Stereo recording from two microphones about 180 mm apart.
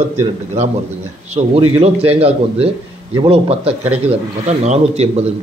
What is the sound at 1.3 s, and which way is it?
A man's voice, 35° right (ahead or behind).